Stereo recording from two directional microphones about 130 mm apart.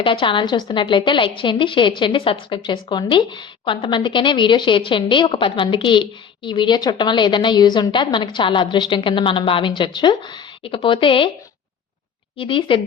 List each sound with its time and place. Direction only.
0.0 s a woman's voice: 40° left (ahead or behind)
12.4 s a woman's voice: 40° left (ahead or behind)